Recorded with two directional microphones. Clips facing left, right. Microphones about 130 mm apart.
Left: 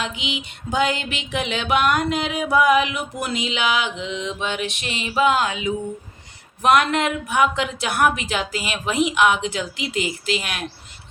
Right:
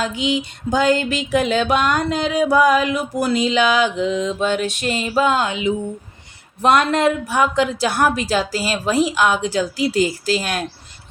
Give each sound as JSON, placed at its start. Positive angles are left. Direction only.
{"t": 0.0, "sound": "music", "side_deg": -35}
{"t": 5.4, "sound": "a sound", "side_deg": -25}
{"t": 6.6, "sound": "music", "side_deg": -30}